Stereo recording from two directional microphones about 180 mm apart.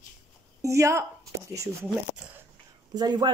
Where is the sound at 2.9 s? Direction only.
25° right (ahead or behind).